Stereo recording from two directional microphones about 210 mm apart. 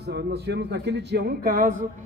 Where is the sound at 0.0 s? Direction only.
50° right (ahead or behind).